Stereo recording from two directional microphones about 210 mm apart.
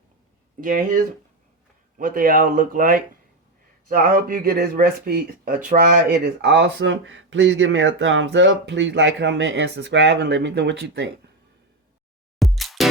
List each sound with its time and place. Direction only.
0.6 s speech: 40° right (ahead or behind); by 11.1 s 60° right (ahead or behind)
12.4 s music: centre (ahead or behind)